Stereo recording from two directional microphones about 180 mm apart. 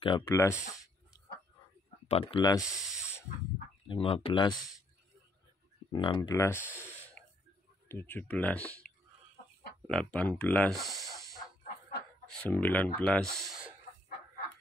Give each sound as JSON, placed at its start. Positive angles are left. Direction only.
{"t": 0.3, "sound": "speech", "side_deg": 15}
{"t": 2.0, "sound": "speech", "side_deg": 30}
{"t": 2.7, "sound": "speech", "side_deg": 0}
{"t": 3.8, "sound": "speech", "side_deg": 30}
{"t": 4.6, "sound": "speech", "side_deg": 0}
{"t": 5.9, "sound": "speech", "side_deg": 25}
{"t": 6.2, "sound": "speech", "side_deg": 15}
{"t": 7.9, "sound": "speech", "side_deg": 10}
{"t": 9.8, "sound": "speech", "side_deg": 5}